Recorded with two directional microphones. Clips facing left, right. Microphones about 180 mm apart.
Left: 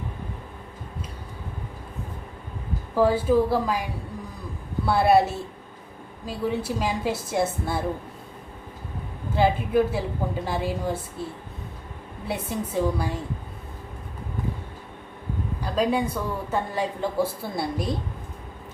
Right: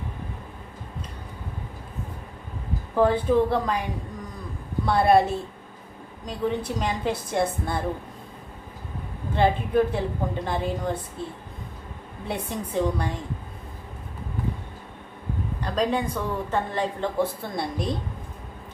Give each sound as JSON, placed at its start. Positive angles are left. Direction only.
{"t": 2.9, "sound": "a woman's voice", "side_deg": 5}
{"t": 4.9, "sound": "a woman's voice", "side_deg": 5}
{"t": 9.3, "sound": "a woman's voice", "side_deg": 5}
{"t": 12.3, "sound": "a woman's voice", "side_deg": 5}
{"t": 15.6, "sound": "a woman's voice", "side_deg": 5}